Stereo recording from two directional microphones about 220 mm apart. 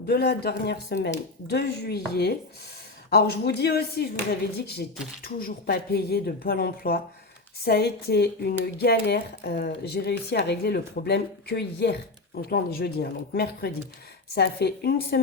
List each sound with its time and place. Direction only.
0.0 s a woman's voice: 45° left (ahead or behind)